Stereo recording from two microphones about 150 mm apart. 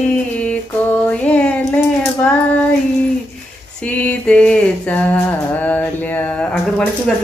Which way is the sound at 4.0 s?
10° left (ahead or behind).